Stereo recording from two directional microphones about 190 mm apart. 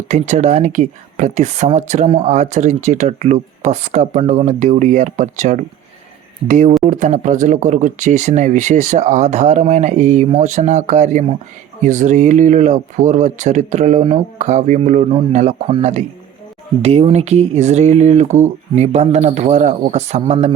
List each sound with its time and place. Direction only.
0.1 s speech: 40° right (ahead or behind)